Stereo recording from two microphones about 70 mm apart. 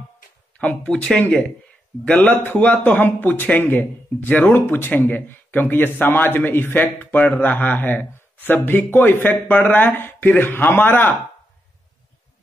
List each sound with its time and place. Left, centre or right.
0.8 s speech: centre
2.0 s speech: left